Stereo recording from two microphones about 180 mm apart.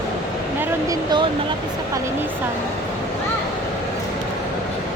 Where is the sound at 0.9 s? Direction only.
25° right (ahead or behind).